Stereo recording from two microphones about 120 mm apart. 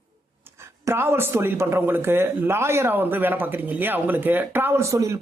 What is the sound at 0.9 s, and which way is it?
Speech, 20° right (ahead or behind).